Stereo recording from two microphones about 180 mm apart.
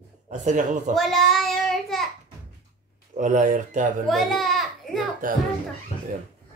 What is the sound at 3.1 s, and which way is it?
Speech, 45° right (ahead or behind).